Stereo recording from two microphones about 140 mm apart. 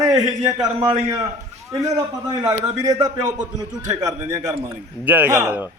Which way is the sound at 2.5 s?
25° right (ahead or behind).